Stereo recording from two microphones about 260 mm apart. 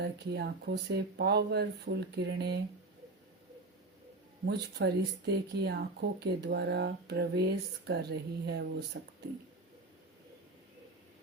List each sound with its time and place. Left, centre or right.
0.0 s speech: right
4.4 s speech: right